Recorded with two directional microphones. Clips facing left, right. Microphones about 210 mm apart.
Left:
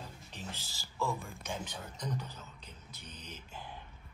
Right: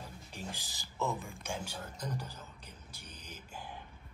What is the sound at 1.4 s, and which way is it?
A man's voice, 10° right (ahead or behind).